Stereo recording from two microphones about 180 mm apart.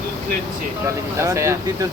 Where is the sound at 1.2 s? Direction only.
15° right (ahead or behind).